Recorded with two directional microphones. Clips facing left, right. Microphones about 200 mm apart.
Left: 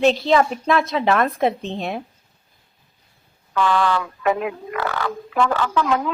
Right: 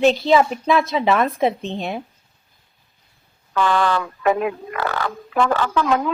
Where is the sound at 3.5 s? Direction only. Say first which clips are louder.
Even; 45° right (ahead or behind).